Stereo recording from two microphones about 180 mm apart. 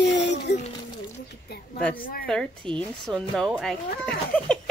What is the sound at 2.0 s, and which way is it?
Speech, 55° left (ahead or behind).